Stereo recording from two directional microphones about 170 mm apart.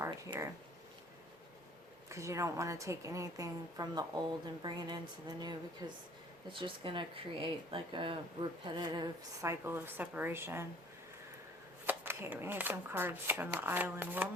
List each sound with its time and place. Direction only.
0.3 s speech: 30° right (ahead or behind)
2.0 s speech: 15° right (ahead or behind)
11.9 s speech: 10° right (ahead or behind)